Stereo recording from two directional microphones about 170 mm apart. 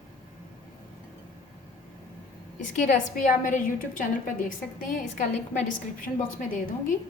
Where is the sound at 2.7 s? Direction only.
50° left (ahead or behind).